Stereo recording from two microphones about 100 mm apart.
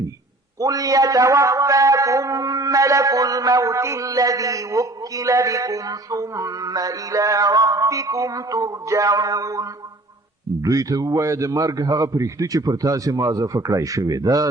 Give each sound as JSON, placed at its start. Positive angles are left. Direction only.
{"t": 0.6, "sound": "a man's voice", "side_deg": -40}